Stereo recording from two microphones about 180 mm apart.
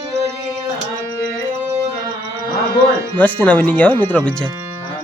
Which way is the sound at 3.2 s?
10° left (ahead or behind).